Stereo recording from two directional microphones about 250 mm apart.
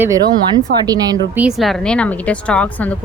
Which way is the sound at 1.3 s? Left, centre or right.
Centre.